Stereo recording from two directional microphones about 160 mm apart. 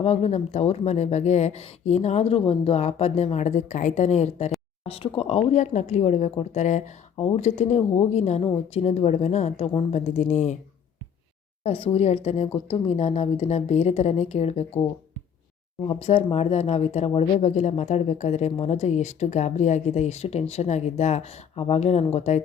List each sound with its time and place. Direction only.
0.0 s speech: 40° left (ahead or behind)
11.6 s a woman's voice: 35° left (ahead or behind)
15.9 s a woman's voice: 40° left (ahead or behind)